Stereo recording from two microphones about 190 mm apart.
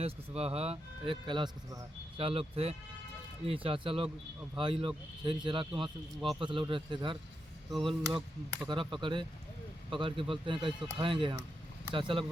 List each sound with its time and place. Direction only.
0.0 s a man's voice: 30° right (ahead or behind)